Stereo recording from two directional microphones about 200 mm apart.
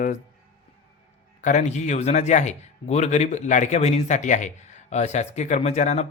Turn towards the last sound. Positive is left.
turn(degrees=35)  # may be behind; listen again after turning